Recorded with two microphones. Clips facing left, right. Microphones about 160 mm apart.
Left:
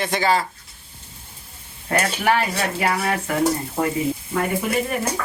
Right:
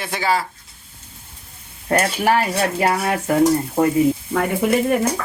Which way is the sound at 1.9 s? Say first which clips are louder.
Right 3 dB; 40° right (ahead or behind).